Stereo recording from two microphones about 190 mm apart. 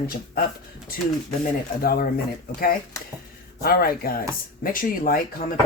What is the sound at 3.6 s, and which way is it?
Speech, 55° left (ahead or behind).